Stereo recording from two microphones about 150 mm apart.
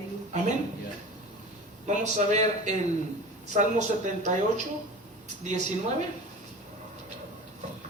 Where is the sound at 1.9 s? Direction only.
50° right (ahead or behind).